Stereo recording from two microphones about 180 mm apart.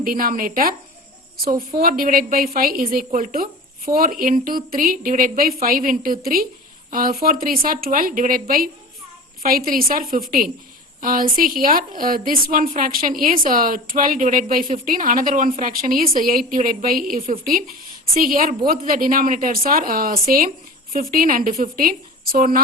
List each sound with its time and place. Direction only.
0.0 s a woman's voice: 50° right (ahead or behind)